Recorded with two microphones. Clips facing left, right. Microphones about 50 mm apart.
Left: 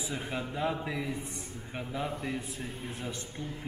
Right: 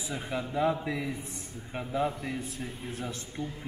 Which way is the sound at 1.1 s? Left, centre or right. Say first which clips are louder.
Left 1 dB; left.